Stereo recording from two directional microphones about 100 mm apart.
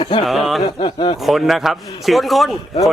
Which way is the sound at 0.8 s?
50° left (ahead or behind).